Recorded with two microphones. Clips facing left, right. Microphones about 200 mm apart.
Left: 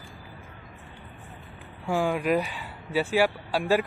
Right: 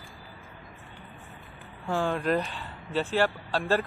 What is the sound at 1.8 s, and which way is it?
Speech, 10° left (ahead or behind).